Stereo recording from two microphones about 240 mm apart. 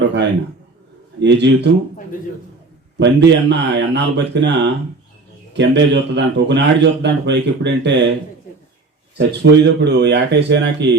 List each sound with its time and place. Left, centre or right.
1.2 s speech: right
3.0 s speech: right
9.1 s speech: right